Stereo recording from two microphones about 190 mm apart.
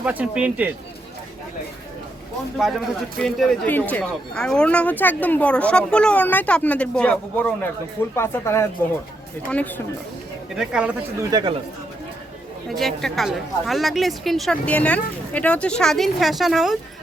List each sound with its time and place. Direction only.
0.0 s speech: 5° right (ahead or behind)
2.6 s a man's voice: centre (ahead or behind)
10.5 s a woman's voice: 5° right (ahead or behind)
11.2 s speech: 20° right (ahead or behind)
12.6 s a woman's voice: centre (ahead or behind)